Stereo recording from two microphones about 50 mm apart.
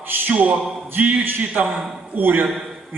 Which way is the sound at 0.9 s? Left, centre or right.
Right.